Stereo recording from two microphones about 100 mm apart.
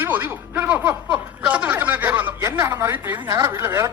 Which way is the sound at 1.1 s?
15° right (ahead or behind).